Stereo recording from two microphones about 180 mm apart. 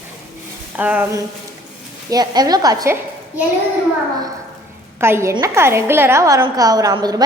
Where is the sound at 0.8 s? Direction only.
10° right (ahead or behind).